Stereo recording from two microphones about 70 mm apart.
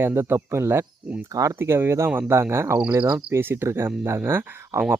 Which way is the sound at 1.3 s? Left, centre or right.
Right.